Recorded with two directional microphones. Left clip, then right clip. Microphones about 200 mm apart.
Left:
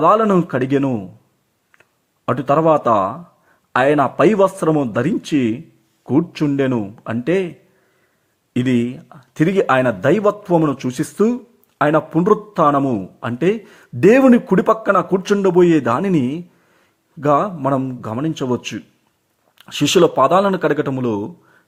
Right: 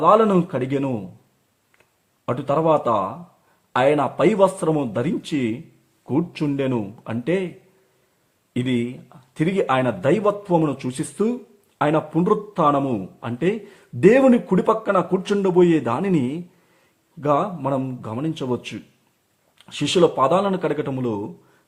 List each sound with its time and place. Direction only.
0.0 s speech: 20° left (ahead or behind)
2.2 s a man's voice: 20° left (ahead or behind)
8.5 s a man's voice: 20° left (ahead or behind)